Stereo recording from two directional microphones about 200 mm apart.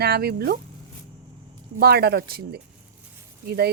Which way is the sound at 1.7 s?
50° right (ahead or behind).